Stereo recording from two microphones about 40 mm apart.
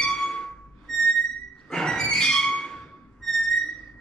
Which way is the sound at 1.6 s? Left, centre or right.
Centre.